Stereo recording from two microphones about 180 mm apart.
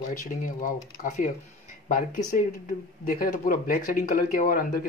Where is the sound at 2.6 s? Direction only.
50° left (ahead or behind).